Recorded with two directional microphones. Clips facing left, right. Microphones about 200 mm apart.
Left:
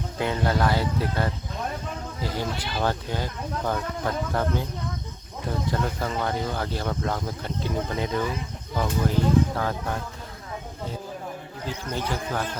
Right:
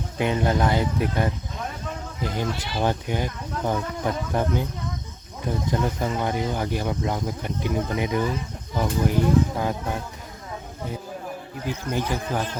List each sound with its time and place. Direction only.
0.2 s speech: 20° right (ahead or behind)
5.5 s speech: 15° right (ahead or behind)
11.6 s speech: 15° right (ahead or behind)